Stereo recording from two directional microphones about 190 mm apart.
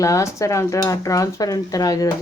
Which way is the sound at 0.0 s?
15° left (ahead or behind).